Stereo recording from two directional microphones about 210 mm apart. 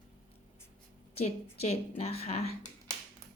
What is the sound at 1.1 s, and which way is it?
A woman's voice, 30° left (ahead or behind).